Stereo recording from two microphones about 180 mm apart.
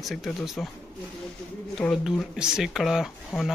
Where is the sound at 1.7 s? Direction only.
Centre (ahead or behind).